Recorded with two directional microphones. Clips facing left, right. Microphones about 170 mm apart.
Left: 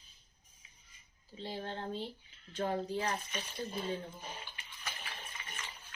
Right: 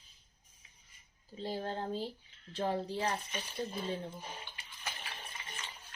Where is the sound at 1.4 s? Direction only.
40° right (ahead or behind).